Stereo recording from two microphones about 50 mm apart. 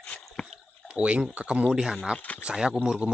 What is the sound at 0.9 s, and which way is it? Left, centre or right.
Speech, right.